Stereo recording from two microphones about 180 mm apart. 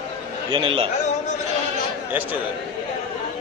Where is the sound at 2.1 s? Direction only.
10° right (ahead or behind).